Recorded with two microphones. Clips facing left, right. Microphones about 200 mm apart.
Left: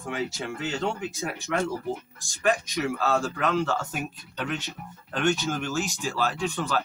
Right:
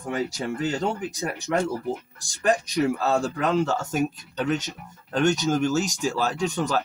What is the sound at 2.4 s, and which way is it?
Speech, 35° right (ahead or behind).